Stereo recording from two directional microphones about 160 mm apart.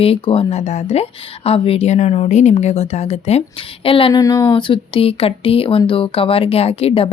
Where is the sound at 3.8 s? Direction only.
35° left (ahead or behind).